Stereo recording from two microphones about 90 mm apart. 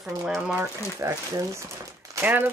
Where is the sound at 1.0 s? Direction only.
35° right (ahead or behind).